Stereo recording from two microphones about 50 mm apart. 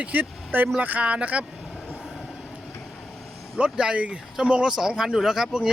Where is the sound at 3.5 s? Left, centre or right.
Centre.